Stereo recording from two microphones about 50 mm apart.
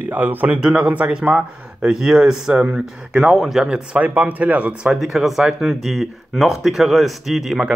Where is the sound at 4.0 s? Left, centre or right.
Right.